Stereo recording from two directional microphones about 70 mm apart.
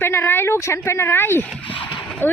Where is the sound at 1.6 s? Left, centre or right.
Left.